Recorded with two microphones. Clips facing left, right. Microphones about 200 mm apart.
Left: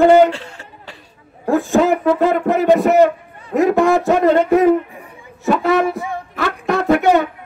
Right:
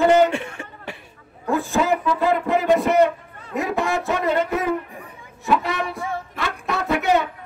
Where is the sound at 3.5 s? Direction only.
50° left (ahead or behind).